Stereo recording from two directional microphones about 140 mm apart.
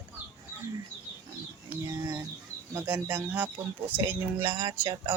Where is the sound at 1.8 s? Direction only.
25° right (ahead or behind).